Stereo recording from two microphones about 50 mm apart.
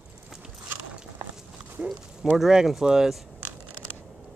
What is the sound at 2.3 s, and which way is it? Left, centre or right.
Speech, centre.